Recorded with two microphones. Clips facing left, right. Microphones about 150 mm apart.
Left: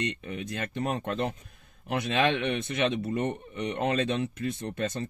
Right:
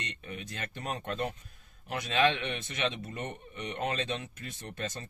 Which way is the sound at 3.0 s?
30° left (ahead or behind).